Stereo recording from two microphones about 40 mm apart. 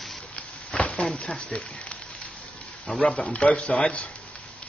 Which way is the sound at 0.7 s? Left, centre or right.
Left.